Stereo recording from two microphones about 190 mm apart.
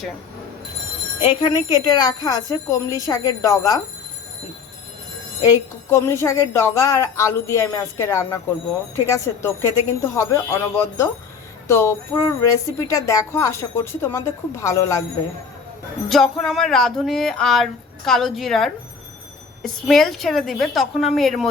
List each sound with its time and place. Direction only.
1.2 s speech: 25° left (ahead or behind)
5.4 s speech: 15° left (ahead or behind)
16.0 s a sound: centre (ahead or behind)